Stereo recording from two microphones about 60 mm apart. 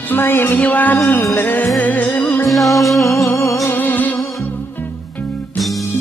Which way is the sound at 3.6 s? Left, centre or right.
Left.